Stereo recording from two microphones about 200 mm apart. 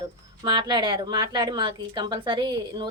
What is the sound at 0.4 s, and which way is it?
Speech, 20° right (ahead or behind).